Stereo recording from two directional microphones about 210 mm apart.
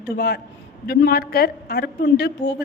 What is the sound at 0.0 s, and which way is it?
Speech, 50° left (ahead or behind).